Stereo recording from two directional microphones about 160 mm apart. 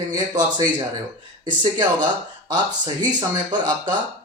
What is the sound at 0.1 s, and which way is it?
Speech, 25° right (ahead or behind).